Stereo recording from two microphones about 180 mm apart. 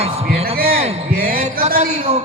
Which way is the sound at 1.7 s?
35° right (ahead or behind).